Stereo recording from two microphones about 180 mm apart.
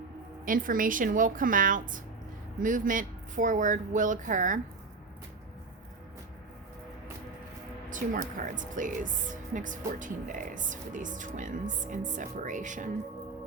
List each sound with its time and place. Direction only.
0.4 s speech: 50° right (ahead or behind)
7.9 s speech: 45° right (ahead or behind)